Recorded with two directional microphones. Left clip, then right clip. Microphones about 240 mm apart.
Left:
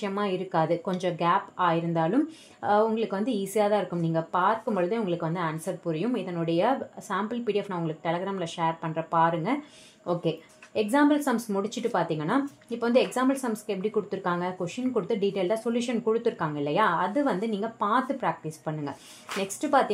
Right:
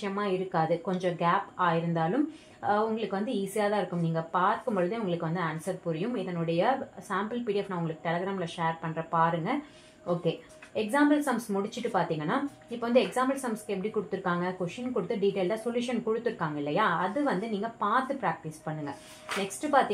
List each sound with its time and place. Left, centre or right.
0.0 s speech: left